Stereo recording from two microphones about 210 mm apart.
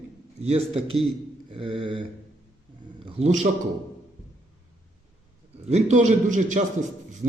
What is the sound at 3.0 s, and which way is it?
Speech, 30° right (ahead or behind).